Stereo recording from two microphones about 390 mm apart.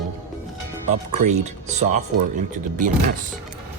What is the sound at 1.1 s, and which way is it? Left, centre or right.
Speech, centre.